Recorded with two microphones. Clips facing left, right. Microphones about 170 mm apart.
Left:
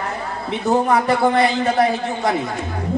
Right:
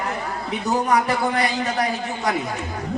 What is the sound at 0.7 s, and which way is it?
A man's voice, 30° left (ahead or behind).